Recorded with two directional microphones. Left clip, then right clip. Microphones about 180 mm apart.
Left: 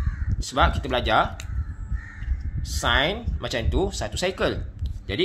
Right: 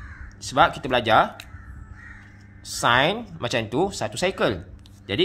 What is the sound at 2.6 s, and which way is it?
Speech, 25° right (ahead or behind).